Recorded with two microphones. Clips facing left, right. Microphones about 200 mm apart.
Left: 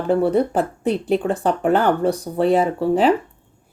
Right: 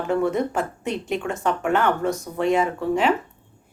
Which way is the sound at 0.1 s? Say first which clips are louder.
Left 5 dB; 35° left (ahead or behind).